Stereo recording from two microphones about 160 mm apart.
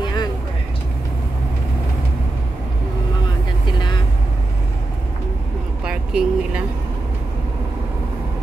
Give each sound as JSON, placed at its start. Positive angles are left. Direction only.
{"t": 0.0, "sound": "vehicle", "side_deg": 25}
{"t": 5.9, "sound": "vehicle", "side_deg": -5}